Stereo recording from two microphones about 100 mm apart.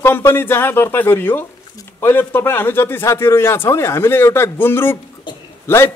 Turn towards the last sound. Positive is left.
turn(degrees=25)  # may be behind; listen again after turning